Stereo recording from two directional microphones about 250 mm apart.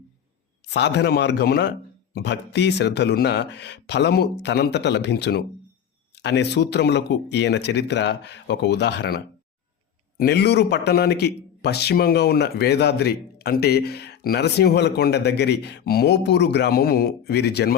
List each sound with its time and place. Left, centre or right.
0.7 s a man's voice: left